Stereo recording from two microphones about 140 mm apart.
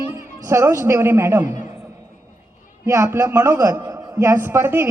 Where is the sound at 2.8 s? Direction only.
20° right (ahead or behind).